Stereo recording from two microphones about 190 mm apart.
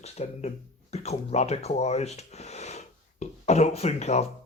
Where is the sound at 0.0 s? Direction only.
35° left (ahead or behind).